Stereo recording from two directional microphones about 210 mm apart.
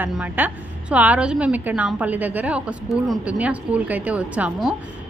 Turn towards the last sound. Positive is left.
turn(degrees=-5)  # may be behind; listen again after turning